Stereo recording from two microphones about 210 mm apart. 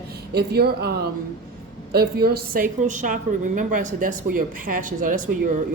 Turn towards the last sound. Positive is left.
turn(degrees=-40)  # may be behind; listen again after turning